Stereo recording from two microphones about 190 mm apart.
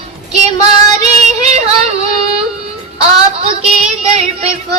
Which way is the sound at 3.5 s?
35° right (ahead or behind).